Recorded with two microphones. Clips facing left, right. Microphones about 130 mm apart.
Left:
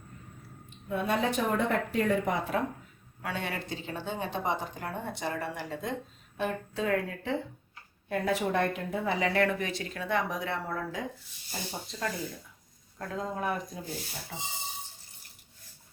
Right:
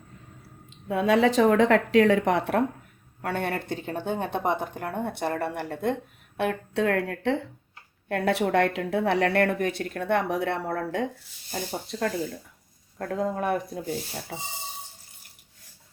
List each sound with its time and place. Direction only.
0.7 s speech: 90° right; by 11.0 s 65° right (ahead or behind)
13.0 s speech: 60° right (ahead or behind)